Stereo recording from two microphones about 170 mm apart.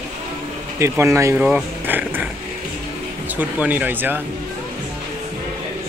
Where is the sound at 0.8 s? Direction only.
15° right (ahead or behind).